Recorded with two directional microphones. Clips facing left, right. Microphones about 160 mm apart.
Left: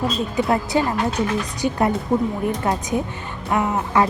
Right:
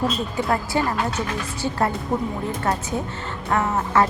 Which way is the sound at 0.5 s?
20° left (ahead or behind).